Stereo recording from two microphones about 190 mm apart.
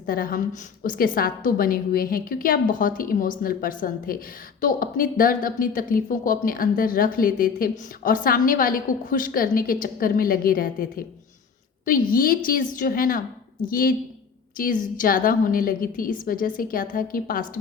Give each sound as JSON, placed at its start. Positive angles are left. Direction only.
{"t": 0.0, "sound": "speech", "side_deg": 50}